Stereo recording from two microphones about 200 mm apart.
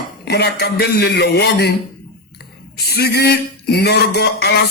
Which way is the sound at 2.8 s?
55° left (ahead or behind).